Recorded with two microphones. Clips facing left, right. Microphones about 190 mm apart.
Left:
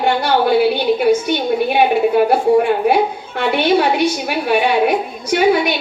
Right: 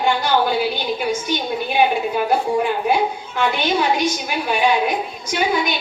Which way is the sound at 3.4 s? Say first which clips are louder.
Left 5 dB; 65° left (ahead or behind).